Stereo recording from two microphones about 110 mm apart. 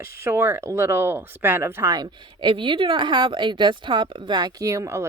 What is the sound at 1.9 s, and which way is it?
Speech, 45° right (ahead or behind).